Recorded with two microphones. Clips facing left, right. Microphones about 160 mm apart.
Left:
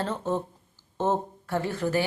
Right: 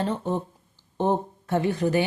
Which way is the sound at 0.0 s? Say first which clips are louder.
Right 2 dB; 15° right (ahead or behind).